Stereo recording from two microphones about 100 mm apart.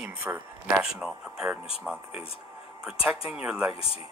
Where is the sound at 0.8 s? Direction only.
5° right (ahead or behind).